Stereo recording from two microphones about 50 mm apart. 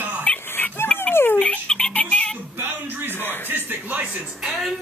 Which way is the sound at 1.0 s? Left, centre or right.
Left.